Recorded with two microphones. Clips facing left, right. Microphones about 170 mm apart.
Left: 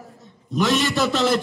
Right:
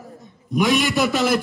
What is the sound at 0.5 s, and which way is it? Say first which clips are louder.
Speech: right 2 dB; 10° right (ahead or behind).